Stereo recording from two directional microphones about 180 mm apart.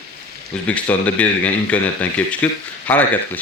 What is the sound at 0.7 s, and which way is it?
Speech, 10° left (ahead or behind).